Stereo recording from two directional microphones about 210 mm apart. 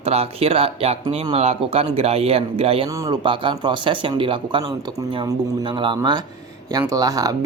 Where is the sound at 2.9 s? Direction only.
15° right (ahead or behind).